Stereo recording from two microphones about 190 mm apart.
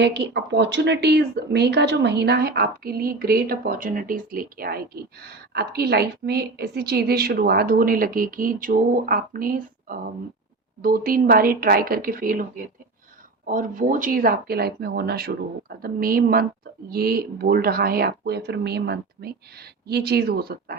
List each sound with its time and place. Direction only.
0.0 s speech: 65° right (ahead or behind)